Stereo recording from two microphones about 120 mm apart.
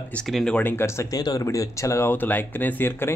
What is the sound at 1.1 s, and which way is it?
Speech, 30° left (ahead or behind).